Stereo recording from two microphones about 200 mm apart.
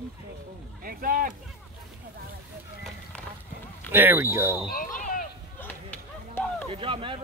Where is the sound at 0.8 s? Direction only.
45° right (ahead or behind).